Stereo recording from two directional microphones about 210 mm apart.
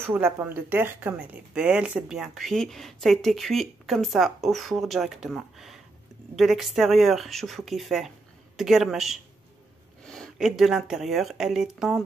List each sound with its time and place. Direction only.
0.0 s speech: 10° right (ahead or behind)